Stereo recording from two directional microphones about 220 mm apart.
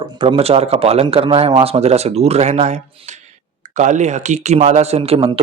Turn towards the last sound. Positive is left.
turn(degrees=-25)  # may be behind; listen again after turning